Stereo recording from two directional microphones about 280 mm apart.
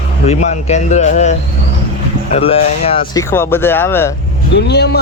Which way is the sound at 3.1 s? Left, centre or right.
Centre.